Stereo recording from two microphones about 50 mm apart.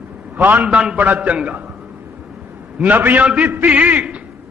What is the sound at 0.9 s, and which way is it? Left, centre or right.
Speech, right.